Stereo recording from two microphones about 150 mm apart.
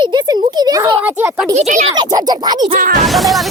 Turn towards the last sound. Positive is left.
turn(degrees=0)  # may be behind; listen again after turning